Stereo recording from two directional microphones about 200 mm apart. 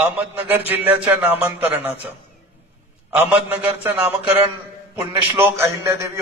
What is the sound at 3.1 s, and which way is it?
A man's voice, 5° right (ahead or behind).